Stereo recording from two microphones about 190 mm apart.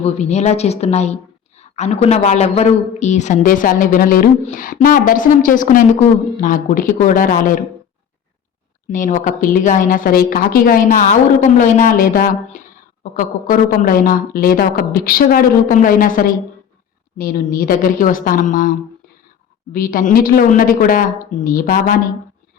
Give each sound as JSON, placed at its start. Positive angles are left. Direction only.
{"t": 0.0, "sound": "a woman's voice", "side_deg": 35}
{"t": 8.9, "sound": "a woman's voice", "side_deg": 45}
{"t": 19.7, "sound": "a woman's voice", "side_deg": 45}